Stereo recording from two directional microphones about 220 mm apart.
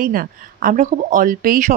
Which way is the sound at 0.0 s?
40° right (ahead or behind).